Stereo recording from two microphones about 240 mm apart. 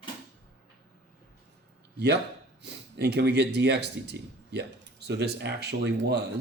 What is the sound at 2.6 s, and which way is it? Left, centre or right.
Speech, right.